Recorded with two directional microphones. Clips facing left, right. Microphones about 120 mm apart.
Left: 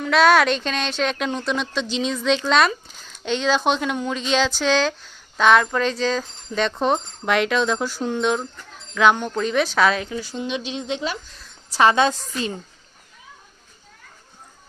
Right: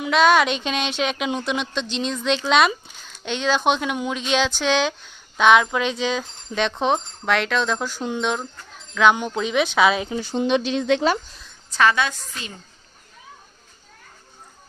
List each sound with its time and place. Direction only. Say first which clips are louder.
0.0 s speech: left 1 dB; centre (ahead or behind)
10.0 s speech: right 2 dB; 25° right (ahead or behind)
10.8 s speech: right 7 dB; 80° right
11.7 s a woman's voice: left 3 dB; 25° left (ahead or behind)